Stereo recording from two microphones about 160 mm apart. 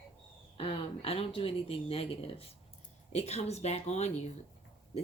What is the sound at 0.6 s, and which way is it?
Speech, 35° left (ahead or behind).